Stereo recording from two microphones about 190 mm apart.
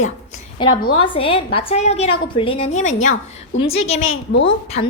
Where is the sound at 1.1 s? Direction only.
30° left (ahead or behind).